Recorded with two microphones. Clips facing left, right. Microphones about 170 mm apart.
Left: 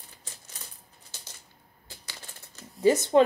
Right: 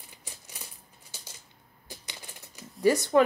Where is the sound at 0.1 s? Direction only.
10° right (ahead or behind).